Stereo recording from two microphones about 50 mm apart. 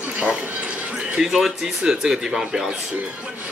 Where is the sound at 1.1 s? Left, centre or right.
Centre.